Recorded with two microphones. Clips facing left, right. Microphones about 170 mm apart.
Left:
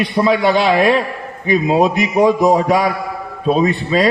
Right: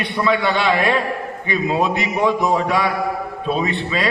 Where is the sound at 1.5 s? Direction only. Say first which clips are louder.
Left 6 dB; 40° left (ahead or behind).